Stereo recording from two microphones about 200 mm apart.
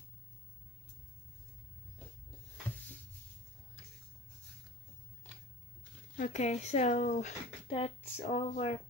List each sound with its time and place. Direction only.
6.1 s speech: 40° left (ahead or behind)